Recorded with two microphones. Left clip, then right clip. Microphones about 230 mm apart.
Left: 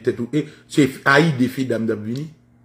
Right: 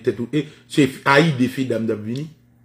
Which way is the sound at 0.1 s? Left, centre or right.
Centre.